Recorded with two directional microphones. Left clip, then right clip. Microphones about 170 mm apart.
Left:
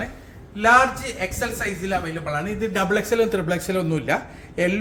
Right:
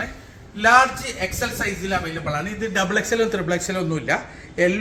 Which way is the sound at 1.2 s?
25° left (ahead or behind).